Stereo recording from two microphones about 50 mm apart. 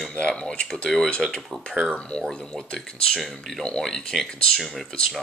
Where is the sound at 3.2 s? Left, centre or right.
Centre.